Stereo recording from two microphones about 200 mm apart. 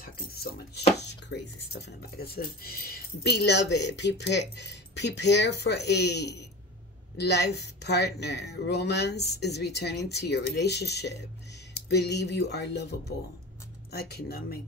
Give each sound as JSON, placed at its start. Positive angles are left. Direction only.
{"t": 0.0, "sound": "speech", "side_deg": 50}